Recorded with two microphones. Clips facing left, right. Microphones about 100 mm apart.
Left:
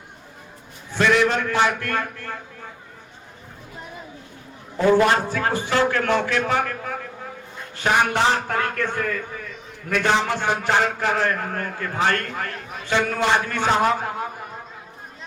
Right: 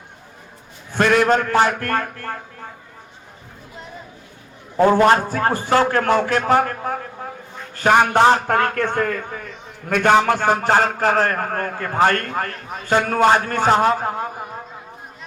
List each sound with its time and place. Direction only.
0.9 s a man's voice: 50° right (ahead or behind)
4.8 s a man's voice: 45° right (ahead or behind)